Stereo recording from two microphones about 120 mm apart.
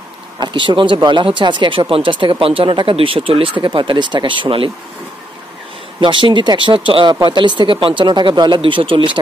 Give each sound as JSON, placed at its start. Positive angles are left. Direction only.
{"t": 0.4, "sound": "speech", "side_deg": -40}
{"t": 5.9, "sound": "speech", "side_deg": -45}